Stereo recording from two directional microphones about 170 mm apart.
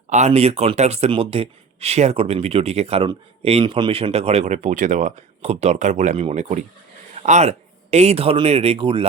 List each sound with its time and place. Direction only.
0.1 s speech: 40° right (ahead or behind)